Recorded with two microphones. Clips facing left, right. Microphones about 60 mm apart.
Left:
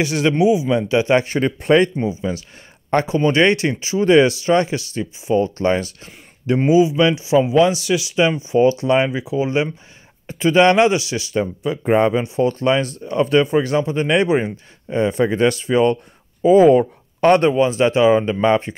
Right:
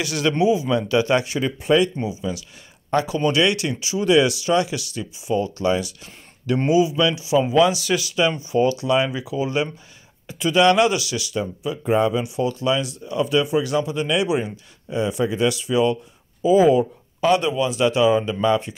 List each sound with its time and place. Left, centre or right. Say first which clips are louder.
0.0 s speech: left 4 dB; left
1.2 s speech: left 4 dB; left
2.0 s speech: left 4 dB; left
7.8 s speech: left 3 dB; centre
11.6 s speech: left 3 dB; left